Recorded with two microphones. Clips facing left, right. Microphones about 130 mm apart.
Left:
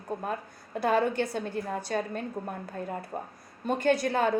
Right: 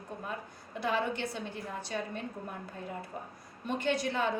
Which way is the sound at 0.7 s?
45° left (ahead or behind).